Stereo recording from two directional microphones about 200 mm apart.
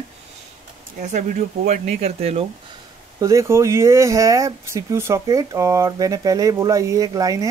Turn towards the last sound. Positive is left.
turn(degrees=-15)  # may be behind; listen again after turning